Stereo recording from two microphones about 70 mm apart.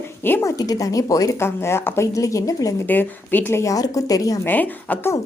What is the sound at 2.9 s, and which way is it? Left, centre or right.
Speech, left.